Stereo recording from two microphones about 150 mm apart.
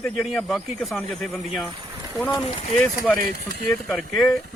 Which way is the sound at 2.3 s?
40° left (ahead or behind).